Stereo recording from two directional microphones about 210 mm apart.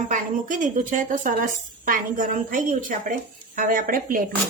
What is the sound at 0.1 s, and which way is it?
A woman's voice, 40° right (ahead or behind).